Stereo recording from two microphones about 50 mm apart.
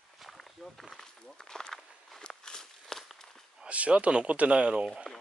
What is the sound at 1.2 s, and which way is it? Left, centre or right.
Walk, centre.